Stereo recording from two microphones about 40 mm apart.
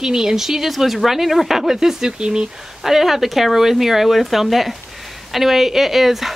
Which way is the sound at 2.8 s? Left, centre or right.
Centre.